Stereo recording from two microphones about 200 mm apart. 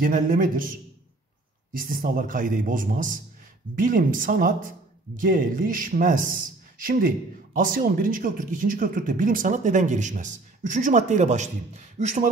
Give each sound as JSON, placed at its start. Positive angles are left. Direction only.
{"t": 0.1, "sound": "speech", "side_deg": -45}
{"t": 1.8, "sound": "speech", "side_deg": -45}